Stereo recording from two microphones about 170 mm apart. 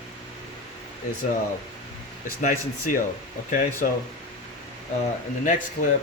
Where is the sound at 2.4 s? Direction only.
55° left (ahead or behind).